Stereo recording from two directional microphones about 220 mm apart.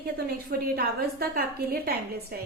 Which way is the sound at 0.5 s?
45° right (ahead or behind).